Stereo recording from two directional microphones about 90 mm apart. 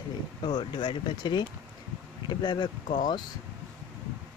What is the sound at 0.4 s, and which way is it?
Speech, 60° left (ahead or behind).